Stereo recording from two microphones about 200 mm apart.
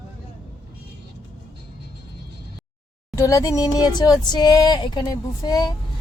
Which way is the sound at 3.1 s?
15° left (ahead or behind).